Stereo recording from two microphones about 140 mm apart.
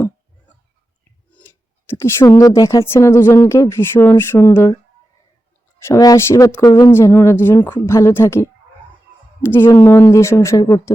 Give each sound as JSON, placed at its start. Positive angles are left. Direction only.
{"t": 1.3, "sound": "a woman's voice", "side_deg": 15}
{"t": 5.8, "sound": "speech", "side_deg": 25}
{"t": 6.9, "sound": "a woman's voice", "side_deg": 15}